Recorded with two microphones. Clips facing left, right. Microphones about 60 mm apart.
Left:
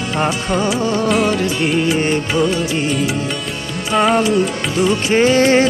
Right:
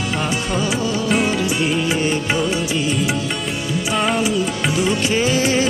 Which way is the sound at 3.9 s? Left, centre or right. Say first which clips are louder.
Left 6 dB; centre.